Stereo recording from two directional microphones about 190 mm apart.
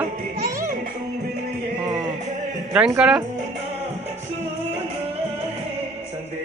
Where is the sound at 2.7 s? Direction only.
5° right (ahead or behind).